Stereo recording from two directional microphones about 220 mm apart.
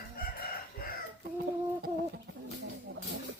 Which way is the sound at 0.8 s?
40° left (ahead or behind).